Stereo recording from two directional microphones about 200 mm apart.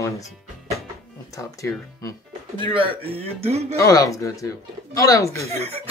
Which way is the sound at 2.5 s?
25° right (ahead or behind).